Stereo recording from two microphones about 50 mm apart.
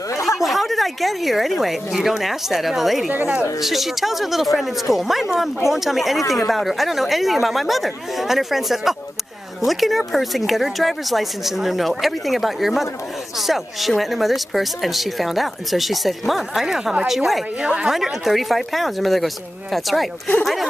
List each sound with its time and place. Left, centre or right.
0.1 s a sound: left
0.4 s speech: centre
17.9 s speech: centre